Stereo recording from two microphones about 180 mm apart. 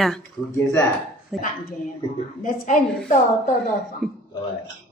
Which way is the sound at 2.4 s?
50° left (ahead or behind).